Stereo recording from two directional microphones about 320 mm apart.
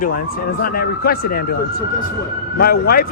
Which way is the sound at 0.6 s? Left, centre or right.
Left.